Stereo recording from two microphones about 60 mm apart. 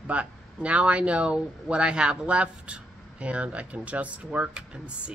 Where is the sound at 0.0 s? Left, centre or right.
Right.